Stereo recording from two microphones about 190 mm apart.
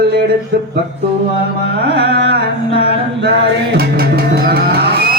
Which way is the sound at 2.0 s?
65° right (ahead or behind).